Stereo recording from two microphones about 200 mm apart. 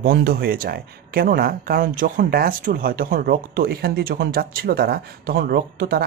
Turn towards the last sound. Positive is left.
turn(degrees=-50)  # may be behind; listen again after turning